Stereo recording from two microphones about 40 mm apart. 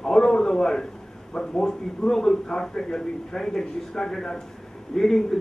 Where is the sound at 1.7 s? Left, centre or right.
Centre.